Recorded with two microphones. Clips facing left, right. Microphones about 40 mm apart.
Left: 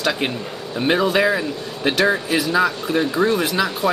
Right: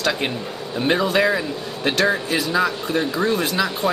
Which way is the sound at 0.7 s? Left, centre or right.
Centre.